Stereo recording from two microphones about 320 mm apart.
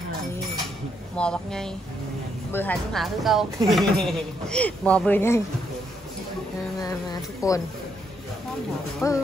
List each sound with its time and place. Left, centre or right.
1.1 s speech: centre
6.8 s speech: centre
9.0 s speech: centre